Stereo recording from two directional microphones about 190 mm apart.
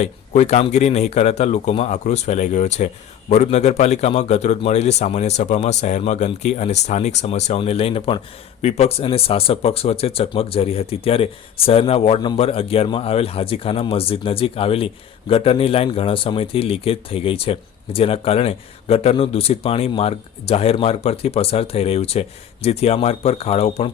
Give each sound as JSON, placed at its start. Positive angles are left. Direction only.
{"t": 0.0, "sound": "speech", "side_deg": 35}